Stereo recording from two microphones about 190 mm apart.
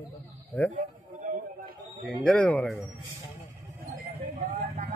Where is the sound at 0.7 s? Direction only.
40° right (ahead or behind).